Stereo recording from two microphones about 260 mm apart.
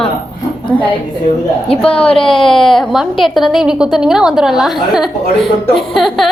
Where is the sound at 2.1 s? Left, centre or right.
Centre.